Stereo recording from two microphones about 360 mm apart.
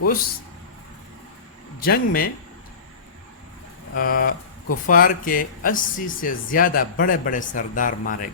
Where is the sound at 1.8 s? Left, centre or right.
Left.